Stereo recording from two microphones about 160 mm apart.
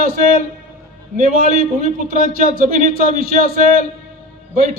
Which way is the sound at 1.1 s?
55° right (ahead or behind).